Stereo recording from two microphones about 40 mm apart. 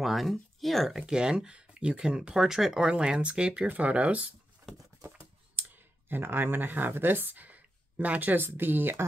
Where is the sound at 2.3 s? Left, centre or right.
Centre.